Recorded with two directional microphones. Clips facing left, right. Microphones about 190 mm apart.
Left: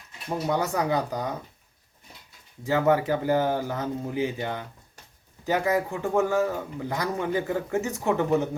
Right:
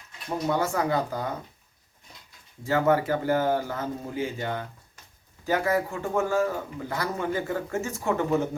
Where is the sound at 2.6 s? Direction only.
15° left (ahead or behind).